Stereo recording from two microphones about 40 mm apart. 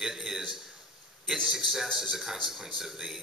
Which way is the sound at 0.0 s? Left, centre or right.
Centre.